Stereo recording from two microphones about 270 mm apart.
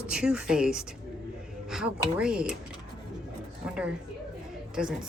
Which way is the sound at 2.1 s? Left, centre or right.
Centre.